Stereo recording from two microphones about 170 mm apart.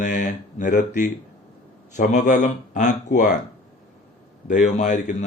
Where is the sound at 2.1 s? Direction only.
45° left (ahead or behind).